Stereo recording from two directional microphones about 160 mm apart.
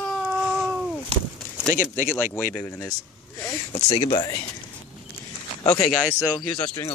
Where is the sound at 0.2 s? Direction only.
Centre (ahead or behind).